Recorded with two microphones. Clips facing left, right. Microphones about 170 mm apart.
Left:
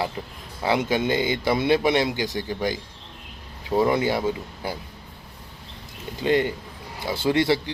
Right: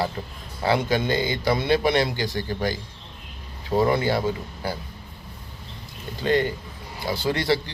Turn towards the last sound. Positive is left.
turn(degrees=20)  # may be behind; listen again after turning